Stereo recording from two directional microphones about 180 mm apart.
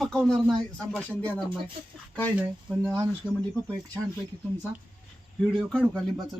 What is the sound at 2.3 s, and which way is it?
Speech, 10° right (ahead or behind).